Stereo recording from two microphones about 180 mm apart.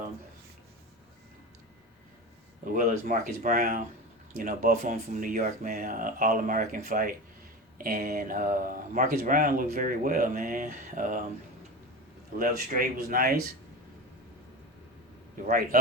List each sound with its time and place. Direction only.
2.6 s speech: 45° right (ahead or behind)
12.4 s speech: 50° right (ahead or behind)
15.4 s speech: 50° right (ahead or behind)